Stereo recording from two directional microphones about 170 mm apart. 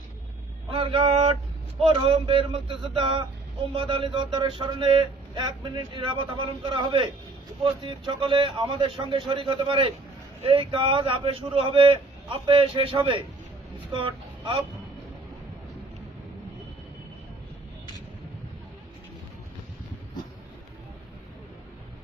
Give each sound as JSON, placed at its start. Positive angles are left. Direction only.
{"t": 0.7, "sound": "vehicle", "side_deg": -35}
{"t": 1.8, "sound": "a man's voice", "side_deg": -30}
{"t": 13.9, "sound": "vehicle", "side_deg": -30}